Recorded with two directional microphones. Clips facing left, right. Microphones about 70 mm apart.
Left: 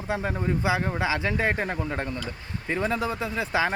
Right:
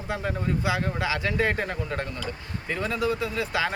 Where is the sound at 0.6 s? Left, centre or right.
Left.